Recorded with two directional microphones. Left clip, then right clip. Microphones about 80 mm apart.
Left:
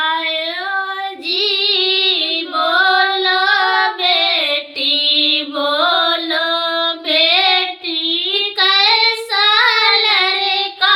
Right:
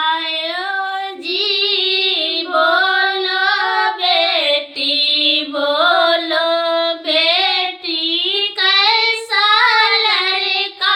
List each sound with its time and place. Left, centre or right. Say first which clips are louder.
1.4 s female singing: left 1 dB; left
4.8 s music: left 3 dB; left
8.0 s child singing: even; centre
8.5 s child singing: left 1 dB; left